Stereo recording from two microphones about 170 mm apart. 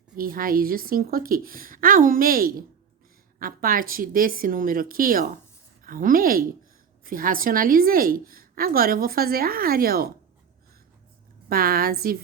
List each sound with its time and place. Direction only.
0.2 s a woman's voice: 60° right (ahead or behind)
11.4 s a woman's voice: 60° right (ahead or behind)